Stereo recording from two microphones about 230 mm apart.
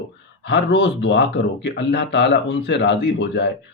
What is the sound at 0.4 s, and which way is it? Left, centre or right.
Speech, left.